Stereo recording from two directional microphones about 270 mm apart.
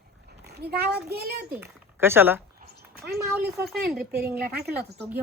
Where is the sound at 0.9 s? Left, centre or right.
Right.